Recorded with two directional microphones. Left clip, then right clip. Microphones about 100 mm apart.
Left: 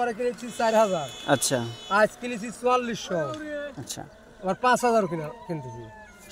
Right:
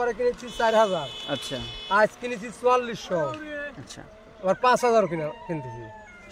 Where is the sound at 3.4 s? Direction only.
30° left (ahead or behind).